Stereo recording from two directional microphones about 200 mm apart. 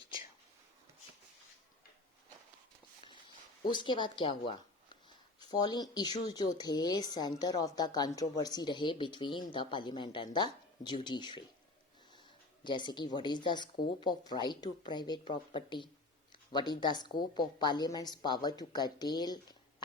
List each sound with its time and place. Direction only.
3.7 s speech: 20° left (ahead or behind)
5.4 s a sound: 20° left (ahead or behind)
6.0 s speech: 20° left (ahead or behind)
12.6 s speech: 20° left (ahead or behind)